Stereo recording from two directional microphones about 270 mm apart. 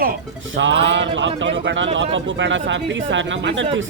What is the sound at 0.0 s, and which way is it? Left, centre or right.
Speech, right.